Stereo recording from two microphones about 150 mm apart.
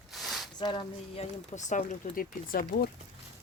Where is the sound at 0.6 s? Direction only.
30° left (ahead or behind); by 2.9 s 75° left (ahead or behind).